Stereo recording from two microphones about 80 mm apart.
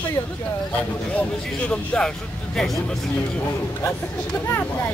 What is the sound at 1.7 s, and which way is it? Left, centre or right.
Speech, centre.